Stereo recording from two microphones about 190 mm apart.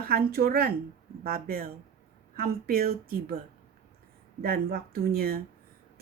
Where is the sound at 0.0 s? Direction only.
50° right (ahead or behind).